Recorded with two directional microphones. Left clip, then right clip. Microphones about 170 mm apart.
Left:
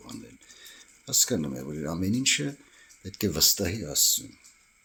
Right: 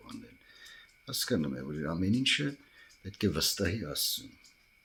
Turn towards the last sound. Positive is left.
turn(degrees=15)  # may be behind; listen again after turning